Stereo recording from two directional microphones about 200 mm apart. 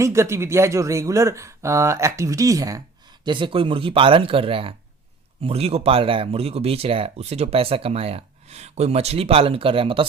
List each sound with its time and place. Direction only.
0.0 s speech: 15° right (ahead or behind)